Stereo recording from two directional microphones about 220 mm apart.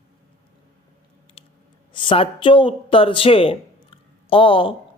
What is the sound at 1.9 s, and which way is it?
Speech, 20° left (ahead or behind).